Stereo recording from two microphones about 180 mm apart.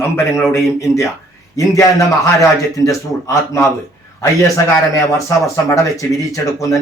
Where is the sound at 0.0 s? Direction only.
15° left (ahead or behind).